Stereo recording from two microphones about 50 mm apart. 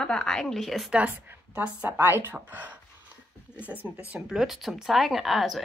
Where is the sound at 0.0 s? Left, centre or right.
Centre.